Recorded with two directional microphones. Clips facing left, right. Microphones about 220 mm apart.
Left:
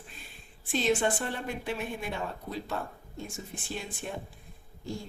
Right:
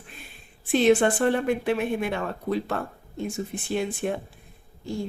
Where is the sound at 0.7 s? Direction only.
65° right (ahead or behind).